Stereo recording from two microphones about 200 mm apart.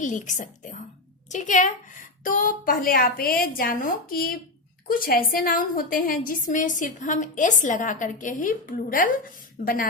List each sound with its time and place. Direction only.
0.0 s a woman's voice: 40° left (ahead or behind)